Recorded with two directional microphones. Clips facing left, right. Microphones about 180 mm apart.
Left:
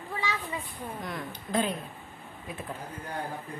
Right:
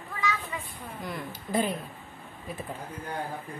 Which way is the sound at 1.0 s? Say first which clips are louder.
Even; centre (ahead or behind).